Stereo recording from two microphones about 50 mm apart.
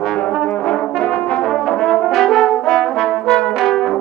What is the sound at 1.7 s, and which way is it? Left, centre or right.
Brass instrument, centre.